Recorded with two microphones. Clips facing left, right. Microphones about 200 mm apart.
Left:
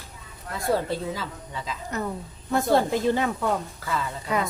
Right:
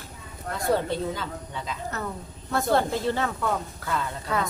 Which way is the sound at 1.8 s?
15° left (ahead or behind).